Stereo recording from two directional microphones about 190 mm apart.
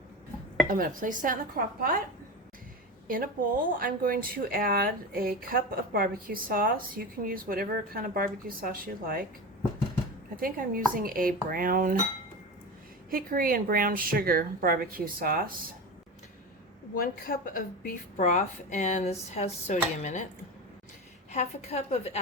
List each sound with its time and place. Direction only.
0.7 s speech: 45° right (ahead or behind)
3.1 s speech: 50° right (ahead or behind)
10.3 s speech: 50° right (ahead or behind)
13.1 s speech: 50° right (ahead or behind)
16.9 s a woman's voice: 50° left (ahead or behind)
21.3 s a woman's voice: 35° left (ahead or behind)